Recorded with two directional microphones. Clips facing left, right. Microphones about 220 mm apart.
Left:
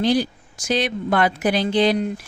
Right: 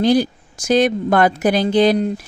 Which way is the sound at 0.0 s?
45° right (ahead or behind).